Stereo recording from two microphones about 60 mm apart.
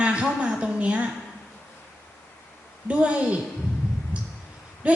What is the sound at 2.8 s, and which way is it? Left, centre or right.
Speech, centre.